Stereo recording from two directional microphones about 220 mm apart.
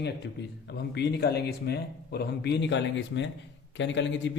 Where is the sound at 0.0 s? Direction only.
50° left (ahead or behind).